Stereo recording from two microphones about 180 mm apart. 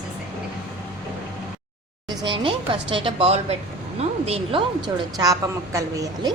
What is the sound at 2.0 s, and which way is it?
Speech, 25° right (ahead or behind).